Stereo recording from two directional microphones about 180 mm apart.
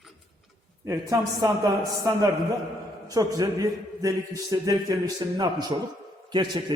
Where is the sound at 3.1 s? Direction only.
20° right (ahead or behind).